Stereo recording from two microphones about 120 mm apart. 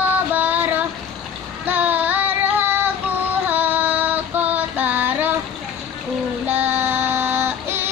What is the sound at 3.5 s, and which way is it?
Female singing, 15° right (ahead or behind).